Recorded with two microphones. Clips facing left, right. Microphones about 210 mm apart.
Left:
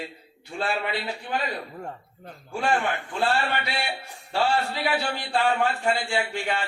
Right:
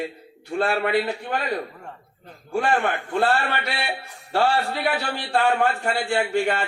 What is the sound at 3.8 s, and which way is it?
A man's voice, 55° right (ahead or behind).